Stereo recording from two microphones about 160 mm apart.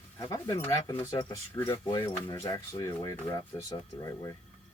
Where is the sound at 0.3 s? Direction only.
15° left (ahead or behind).